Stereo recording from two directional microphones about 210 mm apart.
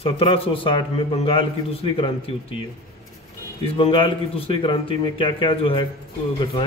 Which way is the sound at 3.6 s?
25° left (ahead or behind).